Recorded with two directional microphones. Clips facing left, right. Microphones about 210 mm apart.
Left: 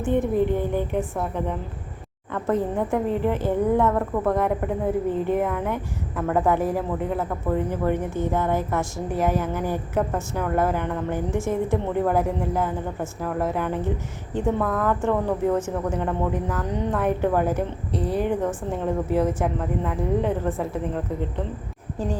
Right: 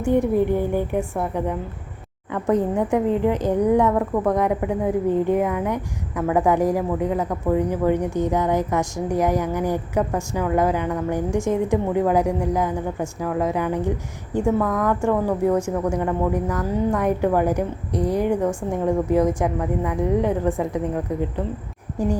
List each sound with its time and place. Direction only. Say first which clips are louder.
0.3 s a woman's voice: right 2 dB; 15° right (ahead or behind)
2.3 s a woman's voice: right 3 dB; 15° right (ahead or behind)